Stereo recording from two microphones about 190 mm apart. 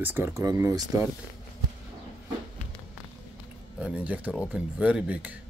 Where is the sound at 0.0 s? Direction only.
10° right (ahead or behind).